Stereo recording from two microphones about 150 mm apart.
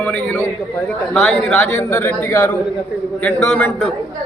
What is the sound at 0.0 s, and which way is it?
A man's voice, 10° left (ahead or behind).